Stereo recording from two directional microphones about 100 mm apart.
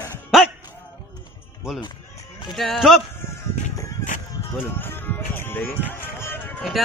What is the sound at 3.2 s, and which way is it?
Music, 30° left (ahead or behind).